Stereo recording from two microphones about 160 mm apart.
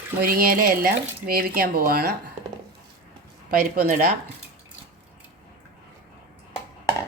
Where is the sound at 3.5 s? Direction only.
60° right (ahead or behind).